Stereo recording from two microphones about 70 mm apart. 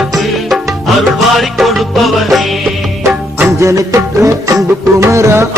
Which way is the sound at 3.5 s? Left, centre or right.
Right.